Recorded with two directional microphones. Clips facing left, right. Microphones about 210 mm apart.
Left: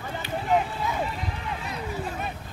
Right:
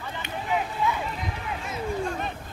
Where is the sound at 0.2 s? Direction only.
40° left (ahead or behind).